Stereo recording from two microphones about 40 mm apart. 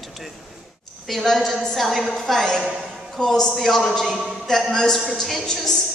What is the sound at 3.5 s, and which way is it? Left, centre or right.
Speech, centre.